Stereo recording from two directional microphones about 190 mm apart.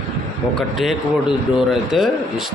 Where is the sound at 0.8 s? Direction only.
Centre (ahead or behind).